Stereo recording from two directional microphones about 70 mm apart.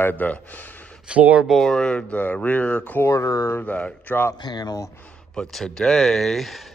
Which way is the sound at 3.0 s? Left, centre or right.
Left.